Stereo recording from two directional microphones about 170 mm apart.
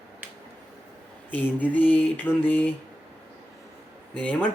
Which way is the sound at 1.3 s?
10° left (ahead or behind).